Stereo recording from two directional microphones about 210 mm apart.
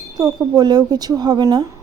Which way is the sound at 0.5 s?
20° right (ahead or behind).